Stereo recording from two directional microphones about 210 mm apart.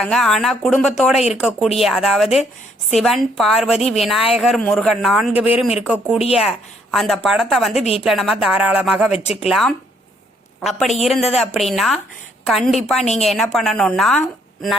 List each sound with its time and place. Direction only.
0.0 s speech: centre (ahead or behind)
7.8 s a woman's voice: 30° left (ahead or behind)
8.0 s speech: centre (ahead or behind)